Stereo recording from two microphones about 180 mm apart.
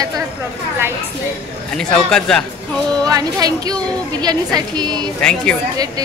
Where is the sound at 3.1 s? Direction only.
20° right (ahead or behind).